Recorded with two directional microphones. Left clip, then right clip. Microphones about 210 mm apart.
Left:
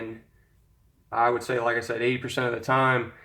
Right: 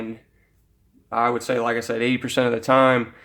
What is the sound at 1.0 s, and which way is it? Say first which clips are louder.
Speech: right 2 dB; 55° right (ahead or behind).